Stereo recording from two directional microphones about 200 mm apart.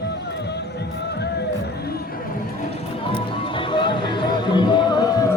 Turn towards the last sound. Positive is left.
turn(degrees=20)  # may be behind; listen again after turning